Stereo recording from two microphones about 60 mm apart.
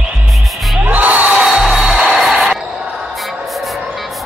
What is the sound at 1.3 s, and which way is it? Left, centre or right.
Music, centre.